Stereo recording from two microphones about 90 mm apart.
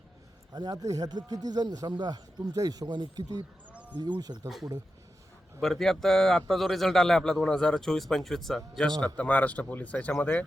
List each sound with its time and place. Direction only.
0.5 s speech: 50° right (ahead or behind)
3.7 s a sound: 15° right (ahead or behind)
3.9 s speech: 55° right (ahead or behind)
5.5 s a man's voice: centre (ahead or behind)
9.1 s speech: 15° left (ahead or behind)